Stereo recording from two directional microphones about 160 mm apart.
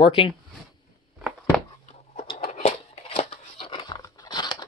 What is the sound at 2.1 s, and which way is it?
Scissors, 35° left (ahead or behind).